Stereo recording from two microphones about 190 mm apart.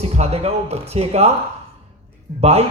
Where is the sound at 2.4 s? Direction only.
35° right (ahead or behind).